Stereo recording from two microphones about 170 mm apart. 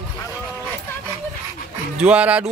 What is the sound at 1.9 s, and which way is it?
Speech, 5° right (ahead or behind).